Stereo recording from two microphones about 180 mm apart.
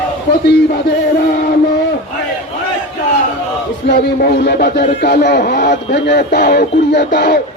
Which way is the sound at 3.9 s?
65° left (ahead or behind).